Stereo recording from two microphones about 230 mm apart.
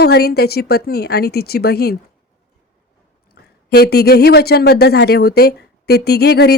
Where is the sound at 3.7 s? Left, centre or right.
Left.